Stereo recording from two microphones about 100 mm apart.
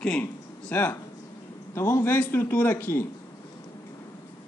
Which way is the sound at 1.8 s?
25° left (ahead or behind).